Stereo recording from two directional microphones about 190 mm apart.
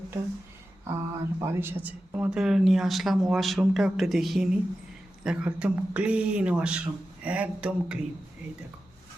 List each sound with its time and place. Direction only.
0.9 s speech: 15° right (ahead or behind)